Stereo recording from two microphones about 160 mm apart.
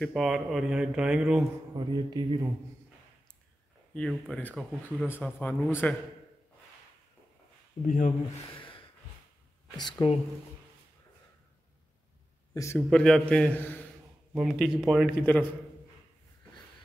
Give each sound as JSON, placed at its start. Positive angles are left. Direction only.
{"t": 0.0, "sound": "speech", "side_deg": 0}
{"t": 1.9, "sound": "a man's voice", "side_deg": -25}
{"t": 3.9, "sound": "speech", "side_deg": 5}
{"t": 7.8, "sound": "speech", "side_deg": 55}
{"t": 8.5, "sound": "a sound", "side_deg": 30}
{"t": 9.8, "sound": "speech", "side_deg": 25}
{"t": 12.7, "sound": "speech", "side_deg": 5}
{"t": 14.3, "sound": "speech", "side_deg": 0}
{"t": 15.3, "sound": "speech", "side_deg": 10}